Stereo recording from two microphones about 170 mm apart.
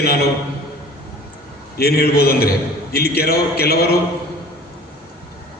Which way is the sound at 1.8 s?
65° left (ahead or behind).